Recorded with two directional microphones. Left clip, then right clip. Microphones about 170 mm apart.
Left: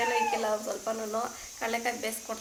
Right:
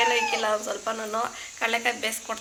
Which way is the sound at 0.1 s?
5° right (ahead or behind).